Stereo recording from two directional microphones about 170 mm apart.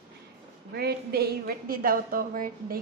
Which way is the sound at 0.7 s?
70° right (ahead or behind).